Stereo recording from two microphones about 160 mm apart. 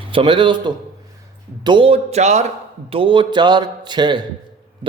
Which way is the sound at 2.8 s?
35° right (ahead or behind).